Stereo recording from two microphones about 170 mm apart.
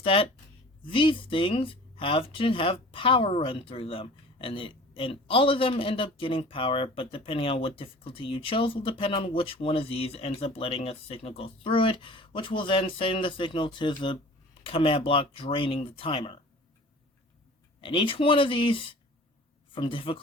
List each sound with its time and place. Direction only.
0.0 s speech: 35° left (ahead or behind)
17.7 s speech: 30° left (ahead or behind)